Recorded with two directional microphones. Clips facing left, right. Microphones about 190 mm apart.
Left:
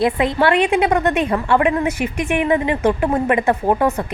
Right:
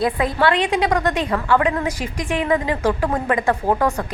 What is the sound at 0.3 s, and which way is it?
A woman's voice, 25° left (ahead or behind).